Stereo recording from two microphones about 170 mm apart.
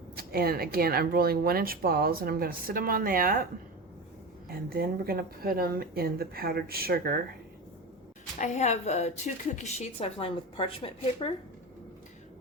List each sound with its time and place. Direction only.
0.2 s speech: 60° right (ahead or behind)
4.4 s speech: 60° right (ahead or behind)
8.4 s a woman's voice: 45° left (ahead or behind)